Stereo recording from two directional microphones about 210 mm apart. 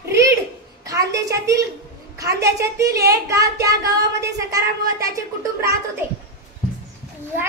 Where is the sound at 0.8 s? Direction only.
15° right (ahead or behind).